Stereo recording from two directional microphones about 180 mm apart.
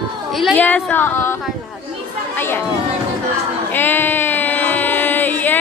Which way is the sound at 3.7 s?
10° left (ahead or behind).